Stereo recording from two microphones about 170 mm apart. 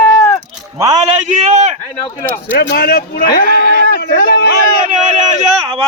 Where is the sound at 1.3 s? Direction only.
45° right (ahead or behind).